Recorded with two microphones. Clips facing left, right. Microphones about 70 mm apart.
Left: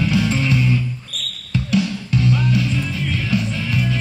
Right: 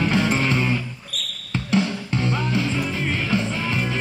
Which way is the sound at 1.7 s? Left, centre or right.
Right.